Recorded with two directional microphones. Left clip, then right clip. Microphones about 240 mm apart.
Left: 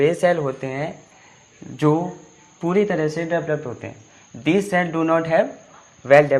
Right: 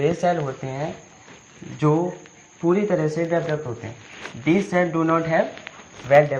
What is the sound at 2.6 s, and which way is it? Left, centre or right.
Speech, left.